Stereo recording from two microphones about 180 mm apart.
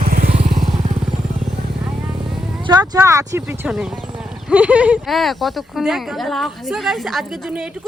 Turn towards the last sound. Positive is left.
turn(degrees=0)  # may be behind; listen again after turning